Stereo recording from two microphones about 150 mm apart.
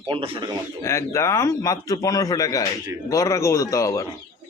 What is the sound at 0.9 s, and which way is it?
A man's voice, 20° left (ahead or behind).